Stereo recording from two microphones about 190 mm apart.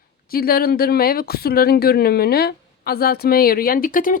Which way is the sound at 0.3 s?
50° left (ahead or behind).